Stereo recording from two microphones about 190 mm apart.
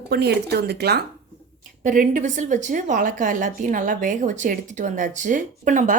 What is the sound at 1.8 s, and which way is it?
A woman's voice, 45° right (ahead or behind).